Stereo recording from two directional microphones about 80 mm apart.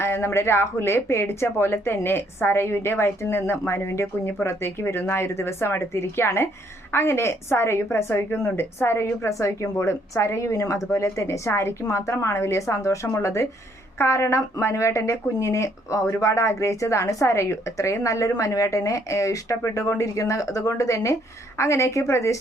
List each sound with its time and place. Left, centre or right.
0.0 s speech: left